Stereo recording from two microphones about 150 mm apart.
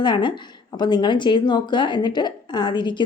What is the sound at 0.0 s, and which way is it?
A woman's voice, 30° left (ahead or behind).